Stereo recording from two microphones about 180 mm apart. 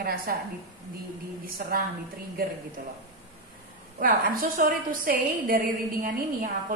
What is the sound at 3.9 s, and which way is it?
A woman's voice, 50° right (ahead or behind).